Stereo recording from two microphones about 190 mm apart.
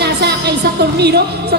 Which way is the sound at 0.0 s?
60° right (ahead or behind).